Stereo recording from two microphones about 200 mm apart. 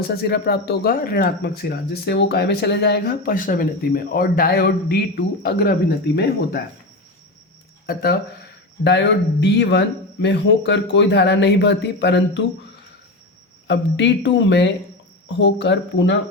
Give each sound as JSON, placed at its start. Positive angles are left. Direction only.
{"t": 0.2, "sound": "speech", "side_deg": 55}
{"t": 8.8, "sound": "a man's voice", "side_deg": 60}
{"t": 13.7, "sound": "a man's voice", "side_deg": 60}